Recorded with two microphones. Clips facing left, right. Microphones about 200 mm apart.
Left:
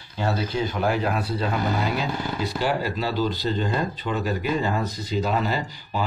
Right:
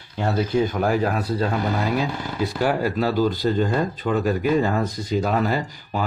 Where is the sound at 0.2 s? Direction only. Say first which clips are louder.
Right 4 dB; 45° right (ahead or behind).